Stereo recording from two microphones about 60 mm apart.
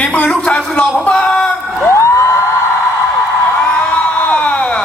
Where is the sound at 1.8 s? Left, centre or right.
Left.